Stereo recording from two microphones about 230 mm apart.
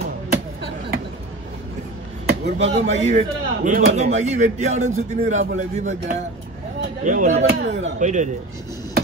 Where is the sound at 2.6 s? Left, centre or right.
Right.